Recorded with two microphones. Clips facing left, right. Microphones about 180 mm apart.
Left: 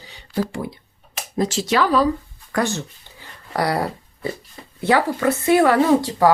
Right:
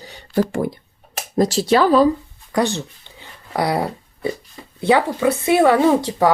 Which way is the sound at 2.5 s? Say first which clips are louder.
Right 3 dB; 20° right (ahead or behind).